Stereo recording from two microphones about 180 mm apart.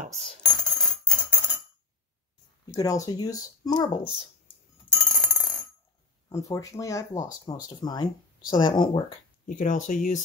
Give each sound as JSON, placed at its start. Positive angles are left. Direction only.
{"t": 0.1, "sound": "coin", "side_deg": 0}
{"t": 2.7, "sound": "speech", "side_deg": 20}
{"t": 5.0, "sound": "telephone bell ringing", "side_deg": 5}
{"t": 6.2, "sound": "speech", "side_deg": 20}
{"t": 9.5, "sound": "speech", "side_deg": 45}